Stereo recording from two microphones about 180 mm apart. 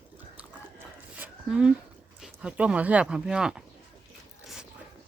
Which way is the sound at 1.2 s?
5° right (ahead or behind).